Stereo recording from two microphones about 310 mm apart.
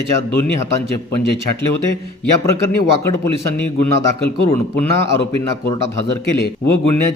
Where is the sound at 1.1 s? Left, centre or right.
Left.